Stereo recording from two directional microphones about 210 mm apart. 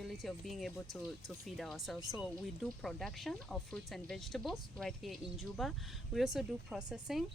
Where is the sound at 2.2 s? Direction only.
Centre (ahead or behind).